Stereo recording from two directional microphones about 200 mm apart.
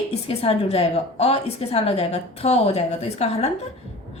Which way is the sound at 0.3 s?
30° left (ahead or behind).